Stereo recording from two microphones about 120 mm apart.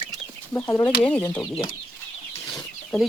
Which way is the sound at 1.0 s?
10° left (ahead or behind).